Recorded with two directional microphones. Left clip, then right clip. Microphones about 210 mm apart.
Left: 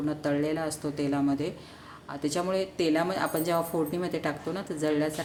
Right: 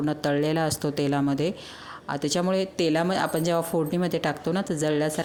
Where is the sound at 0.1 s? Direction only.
40° right (ahead or behind).